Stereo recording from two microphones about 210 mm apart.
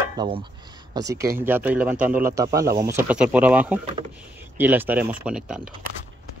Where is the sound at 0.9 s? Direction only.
15° right (ahead or behind).